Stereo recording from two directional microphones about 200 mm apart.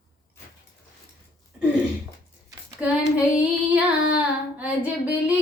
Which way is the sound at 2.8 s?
5° right (ahead or behind).